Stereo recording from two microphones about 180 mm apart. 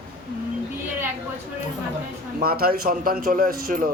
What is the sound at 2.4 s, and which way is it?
A man's voice, 55° right (ahead or behind).